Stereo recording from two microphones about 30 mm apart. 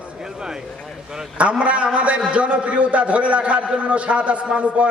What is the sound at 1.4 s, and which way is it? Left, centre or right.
A man's voice, right.